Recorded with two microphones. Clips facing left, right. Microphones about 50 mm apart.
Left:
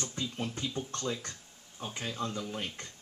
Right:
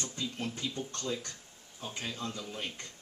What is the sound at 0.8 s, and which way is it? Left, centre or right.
Speech, left.